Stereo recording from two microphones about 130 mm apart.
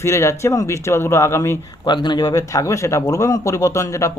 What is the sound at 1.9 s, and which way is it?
Speech, 35° left (ahead or behind).